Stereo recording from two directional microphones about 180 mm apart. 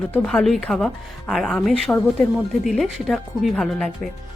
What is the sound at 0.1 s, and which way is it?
A woman's voice, 5° left (ahead or behind).